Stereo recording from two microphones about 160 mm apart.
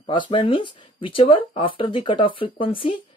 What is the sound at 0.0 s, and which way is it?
Speech, 30° left (ahead or behind).